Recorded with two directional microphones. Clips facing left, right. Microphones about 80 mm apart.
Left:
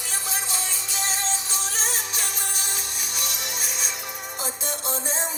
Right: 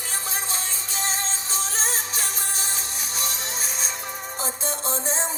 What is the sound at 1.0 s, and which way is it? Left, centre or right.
Music, right.